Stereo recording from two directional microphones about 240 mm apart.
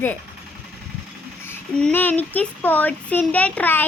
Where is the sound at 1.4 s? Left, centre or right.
Centre.